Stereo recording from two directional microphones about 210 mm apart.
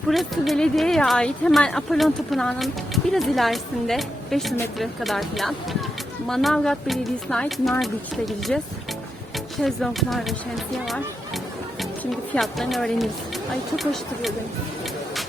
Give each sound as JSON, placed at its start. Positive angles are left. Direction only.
{"t": 0.1, "sound": "speech", "side_deg": 0}
{"t": 12.3, "sound": "speech", "side_deg": 0}